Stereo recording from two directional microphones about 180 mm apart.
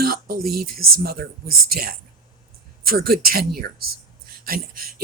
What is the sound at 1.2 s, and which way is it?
Speech, 75° right (ahead or behind).